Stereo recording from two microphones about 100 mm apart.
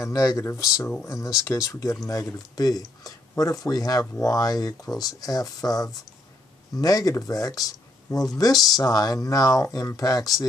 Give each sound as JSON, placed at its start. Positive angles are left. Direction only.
{"t": 0.0, "sound": "speech", "side_deg": 35}